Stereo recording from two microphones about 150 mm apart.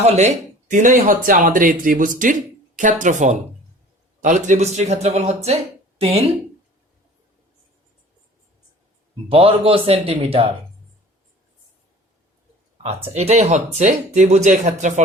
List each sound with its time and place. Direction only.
0.0 s speech: 50° right (ahead or behind)
9.3 s a man's voice: 40° right (ahead or behind)
13.1 s speech: 45° right (ahead or behind)